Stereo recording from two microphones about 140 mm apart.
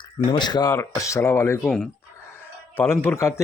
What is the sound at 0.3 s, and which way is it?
Speech, 30° left (ahead or behind).